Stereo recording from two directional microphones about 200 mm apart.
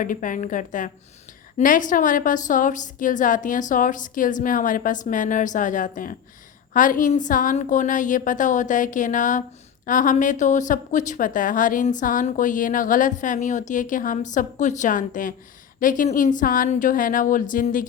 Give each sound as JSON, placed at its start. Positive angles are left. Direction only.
{"t": 0.0, "sound": "a woman's voice", "side_deg": 40}